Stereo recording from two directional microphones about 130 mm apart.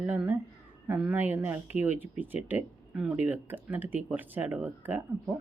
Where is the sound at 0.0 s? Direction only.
10° right (ahead or behind).